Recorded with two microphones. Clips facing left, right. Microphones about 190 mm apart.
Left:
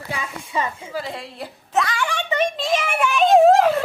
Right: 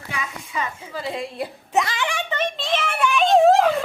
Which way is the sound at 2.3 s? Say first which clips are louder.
Left 7 dB; 10° left (ahead or behind).